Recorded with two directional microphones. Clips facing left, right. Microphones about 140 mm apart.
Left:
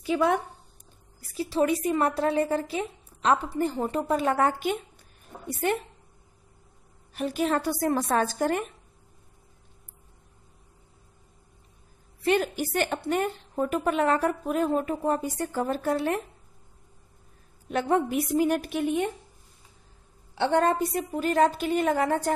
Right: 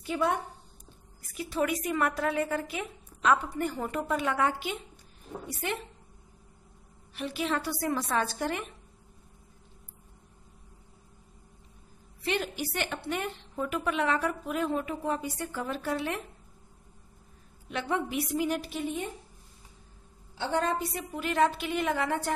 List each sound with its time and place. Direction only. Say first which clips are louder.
0.0 s a woman's voice: left 5 dB; 90° left
1.3 s a woman's voice: left 5 dB; 30° left (ahead or behind); by 4.7 s 45° left (ahead or behind)
7.2 s a woman's voice: left 5 dB; 45° left (ahead or behind)
12.2 s a woman's voice: left 7 dB; 50° left (ahead or behind)
17.6 s a woman's voice: left 7 dB; 45° left (ahead or behind); by 19.1 s 70° left (ahead or behind)
20.3 s a woman's voice: left 6 dB; 60° left (ahead or behind)
21.0 s a woman's voice: left 3 dB; 40° left (ahead or behind)